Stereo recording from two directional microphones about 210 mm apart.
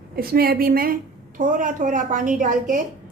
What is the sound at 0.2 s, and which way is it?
A woman's voice, 45° right (ahead or behind).